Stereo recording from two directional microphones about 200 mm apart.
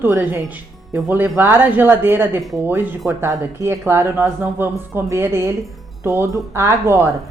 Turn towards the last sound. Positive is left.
turn(degrees=-15)  # may be behind; listen again after turning